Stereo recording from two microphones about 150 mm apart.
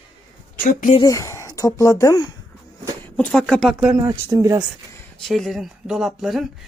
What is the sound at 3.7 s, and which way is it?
Speech, 10° right (ahead or behind).